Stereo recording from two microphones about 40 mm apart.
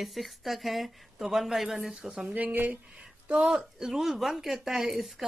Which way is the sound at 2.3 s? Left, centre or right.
Right.